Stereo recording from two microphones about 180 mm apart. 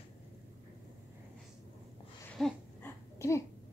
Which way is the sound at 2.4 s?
10° left (ahead or behind).